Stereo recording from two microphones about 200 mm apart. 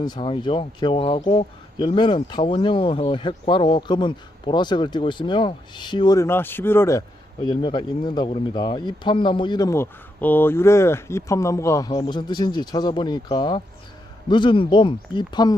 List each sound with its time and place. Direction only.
0.0 s speech: 20° left (ahead or behind)
7.4 s speech: 25° left (ahead or behind)